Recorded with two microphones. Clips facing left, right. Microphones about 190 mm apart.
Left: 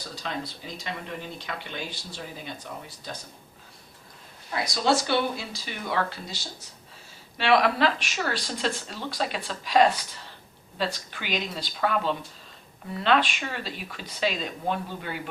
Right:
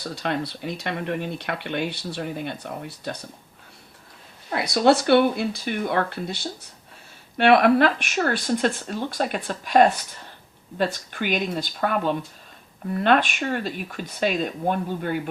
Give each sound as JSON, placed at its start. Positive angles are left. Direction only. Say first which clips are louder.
{"t": 0.0, "sound": "speech", "louder": "right 7 dB", "side_deg": -65}
{"t": 4.4, "sound": "speech", "louder": "right 7 dB", "side_deg": -60}